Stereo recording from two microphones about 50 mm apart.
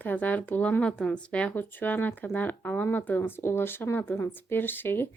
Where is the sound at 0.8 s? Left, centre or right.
Centre.